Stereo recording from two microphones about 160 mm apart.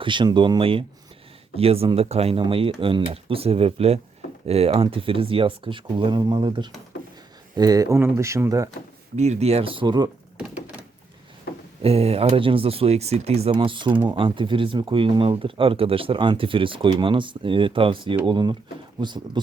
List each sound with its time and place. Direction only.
0.0 s speech: 30° right (ahead or behind)
9.1 s speech: 45° right (ahead or behind); by 10.1 s 25° right (ahead or behind)
10.3 s thunk: 5° right (ahead or behind)
11.8 s speech: 40° right (ahead or behind)